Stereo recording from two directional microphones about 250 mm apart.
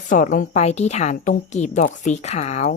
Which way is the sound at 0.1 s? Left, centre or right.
Left.